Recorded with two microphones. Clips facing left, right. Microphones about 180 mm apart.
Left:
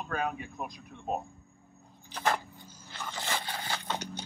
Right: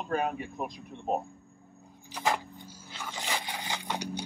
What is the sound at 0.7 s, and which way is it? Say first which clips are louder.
Speech: right 3 dB; 15° right (ahead or behind).